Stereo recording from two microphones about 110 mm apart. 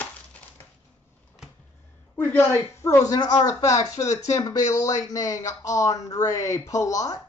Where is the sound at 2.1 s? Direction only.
20° left (ahead or behind).